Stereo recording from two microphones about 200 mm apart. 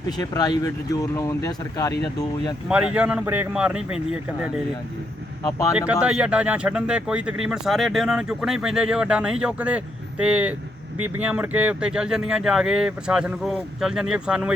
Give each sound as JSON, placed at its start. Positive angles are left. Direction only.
{"t": 0.2, "sound": "speech", "side_deg": 20}
{"t": 2.6, "sound": "speech", "side_deg": -5}
{"t": 5.4, "sound": "speech", "side_deg": 15}
{"t": 5.7, "sound": "speech", "side_deg": -5}